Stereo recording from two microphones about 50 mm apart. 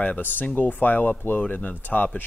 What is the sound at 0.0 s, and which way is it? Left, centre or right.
Speech, left.